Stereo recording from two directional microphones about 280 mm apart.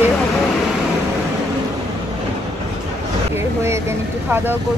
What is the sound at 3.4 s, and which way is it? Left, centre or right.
Speech, centre.